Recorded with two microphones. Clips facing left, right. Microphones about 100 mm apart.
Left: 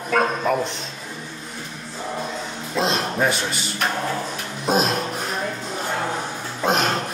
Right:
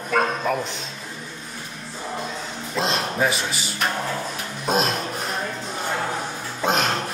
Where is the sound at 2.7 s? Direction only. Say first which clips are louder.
Left 2 dB; centre (ahead or behind).